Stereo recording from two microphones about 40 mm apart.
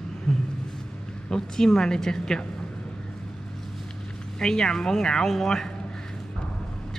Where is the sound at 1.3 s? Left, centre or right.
Centre.